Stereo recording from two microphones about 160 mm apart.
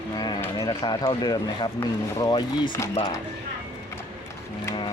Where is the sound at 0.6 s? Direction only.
25° left (ahead or behind).